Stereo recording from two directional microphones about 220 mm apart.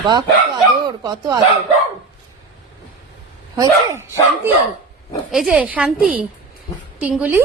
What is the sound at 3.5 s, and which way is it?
Speech, 15° right (ahead or behind).